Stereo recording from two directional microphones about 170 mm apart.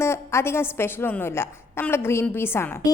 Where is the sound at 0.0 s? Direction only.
15° left (ahead or behind).